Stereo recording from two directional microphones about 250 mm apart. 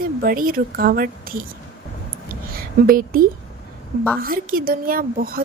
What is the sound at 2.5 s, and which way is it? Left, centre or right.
A woman's voice, right.